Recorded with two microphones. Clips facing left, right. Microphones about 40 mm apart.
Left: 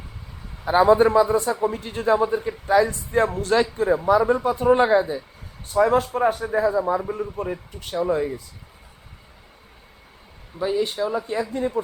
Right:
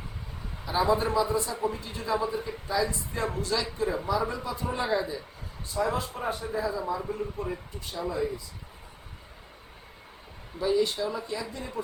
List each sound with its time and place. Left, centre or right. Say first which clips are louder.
0.6 s a man's voice: left 10 dB; left
7.8 s a man's voice: left 9 dB; left
10.6 s speech: left 3 dB; left